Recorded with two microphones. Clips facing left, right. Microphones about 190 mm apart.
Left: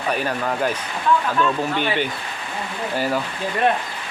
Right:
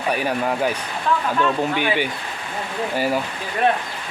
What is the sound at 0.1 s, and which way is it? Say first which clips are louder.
Speech: right 2 dB; 10° right (ahead or behind).